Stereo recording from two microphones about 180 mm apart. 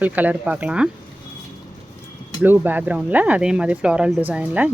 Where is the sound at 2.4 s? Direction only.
10° right (ahead or behind).